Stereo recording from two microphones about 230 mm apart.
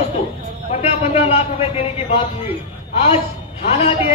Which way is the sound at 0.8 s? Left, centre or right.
Left.